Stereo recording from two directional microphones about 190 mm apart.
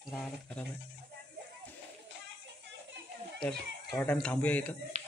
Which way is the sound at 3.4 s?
5° left (ahead or behind).